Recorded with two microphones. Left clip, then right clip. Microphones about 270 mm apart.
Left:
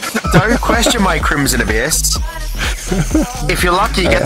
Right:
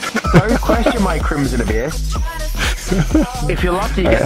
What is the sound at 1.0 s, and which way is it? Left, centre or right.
Speech, left.